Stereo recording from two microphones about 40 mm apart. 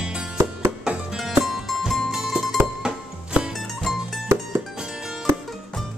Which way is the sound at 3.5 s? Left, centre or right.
Centre.